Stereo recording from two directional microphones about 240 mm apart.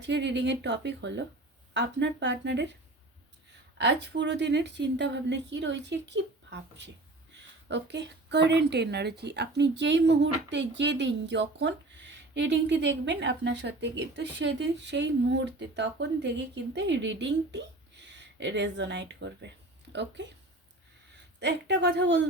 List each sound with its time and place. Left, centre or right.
0.0 s a woman's voice: right
3.8 s a woman's voice: right
21.3 s a woman's voice: right